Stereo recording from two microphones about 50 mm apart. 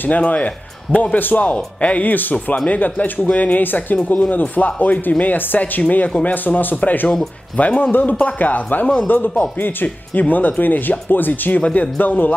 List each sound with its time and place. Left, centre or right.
0.2 s speech: left
2.5 s speech: left
2.8 s speech: left
11.6 s speech: left
12.0 s speech: left